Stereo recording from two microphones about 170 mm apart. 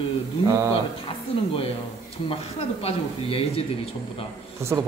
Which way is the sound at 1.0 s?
30° left (ahead or behind).